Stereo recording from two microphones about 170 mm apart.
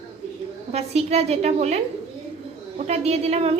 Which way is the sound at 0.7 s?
40° right (ahead or behind).